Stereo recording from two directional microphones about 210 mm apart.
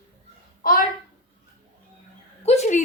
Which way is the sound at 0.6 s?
45° left (ahead or behind).